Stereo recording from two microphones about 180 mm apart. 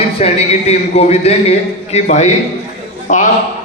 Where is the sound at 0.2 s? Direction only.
35° left (ahead or behind).